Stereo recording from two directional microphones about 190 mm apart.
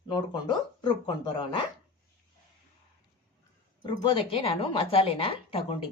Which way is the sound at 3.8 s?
25° left (ahead or behind).